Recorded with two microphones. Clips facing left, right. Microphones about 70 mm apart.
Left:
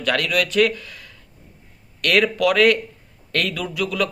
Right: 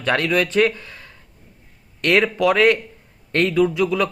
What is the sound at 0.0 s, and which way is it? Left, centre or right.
A man's voice, right.